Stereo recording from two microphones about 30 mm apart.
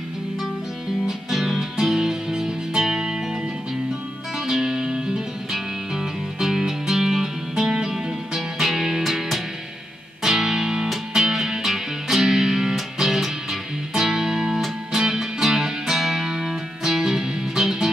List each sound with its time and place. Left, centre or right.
1.3 s music: centre
4.4 s music: centre
6.4 s music: centre
10.2 s music: centre